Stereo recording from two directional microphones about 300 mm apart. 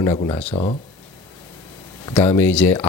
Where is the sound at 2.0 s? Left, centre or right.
Centre.